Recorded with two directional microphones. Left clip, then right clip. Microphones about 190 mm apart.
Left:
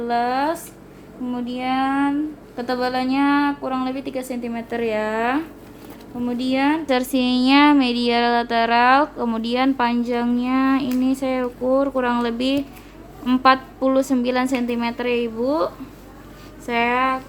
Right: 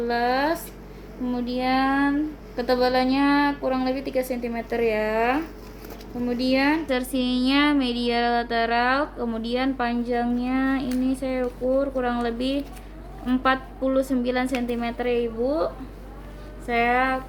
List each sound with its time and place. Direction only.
0.1 s a woman's voice: 40° left (ahead or behind)
1.8 s a woman's voice: 35° left (ahead or behind)